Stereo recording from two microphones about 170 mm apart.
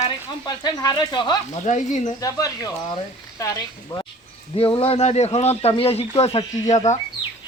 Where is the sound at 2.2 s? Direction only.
20° left (ahead or behind).